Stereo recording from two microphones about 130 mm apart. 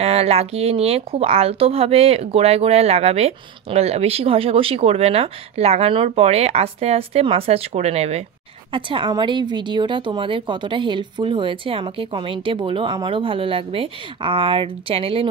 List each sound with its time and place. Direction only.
0.0 s speech: 50° right (ahead or behind)
8.7 s a woman's voice: 40° right (ahead or behind)